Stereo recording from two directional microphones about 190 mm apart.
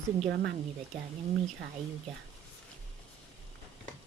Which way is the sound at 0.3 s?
65° right (ahead or behind).